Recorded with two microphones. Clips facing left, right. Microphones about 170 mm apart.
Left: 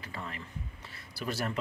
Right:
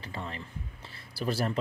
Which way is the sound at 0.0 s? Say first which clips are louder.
Right 3 dB; 30° right (ahead or behind).